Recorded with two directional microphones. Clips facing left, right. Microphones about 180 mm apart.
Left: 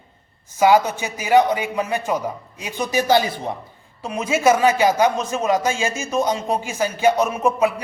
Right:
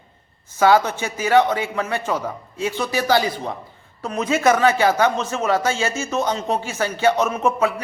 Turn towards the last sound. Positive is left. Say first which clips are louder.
# left 1 dB
turn(degrees=15)  # may be behind; listen again after turning